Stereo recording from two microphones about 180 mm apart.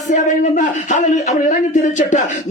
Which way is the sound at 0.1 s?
45° left (ahead or behind).